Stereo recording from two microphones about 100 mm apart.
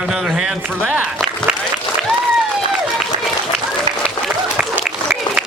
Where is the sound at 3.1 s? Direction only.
50° right (ahead or behind).